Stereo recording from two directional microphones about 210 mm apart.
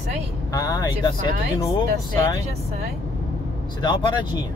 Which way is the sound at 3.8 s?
20° left (ahead or behind).